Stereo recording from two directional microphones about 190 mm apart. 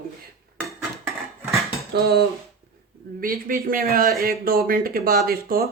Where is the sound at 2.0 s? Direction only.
60° right (ahead or behind).